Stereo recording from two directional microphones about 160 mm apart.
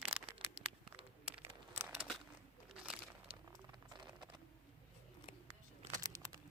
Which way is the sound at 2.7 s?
5° right (ahead or behind).